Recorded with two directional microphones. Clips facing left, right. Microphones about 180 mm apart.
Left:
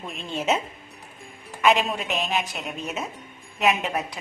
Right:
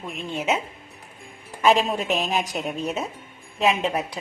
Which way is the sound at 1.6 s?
35° right (ahead or behind).